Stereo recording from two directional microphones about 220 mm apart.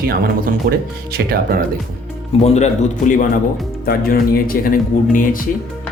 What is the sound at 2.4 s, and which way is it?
Speech, 30° left (ahead or behind).